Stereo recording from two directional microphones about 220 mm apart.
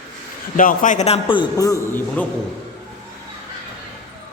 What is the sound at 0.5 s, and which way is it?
A man's voice, 40° left (ahead or behind).